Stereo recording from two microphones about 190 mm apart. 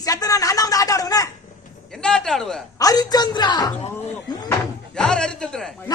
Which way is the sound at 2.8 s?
20° left (ahead or behind).